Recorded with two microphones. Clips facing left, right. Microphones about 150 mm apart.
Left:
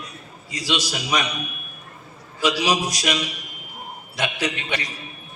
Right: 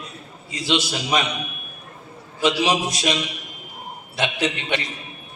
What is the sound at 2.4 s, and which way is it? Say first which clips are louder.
A man's voice: right 1 dB; 25° right (ahead or behind).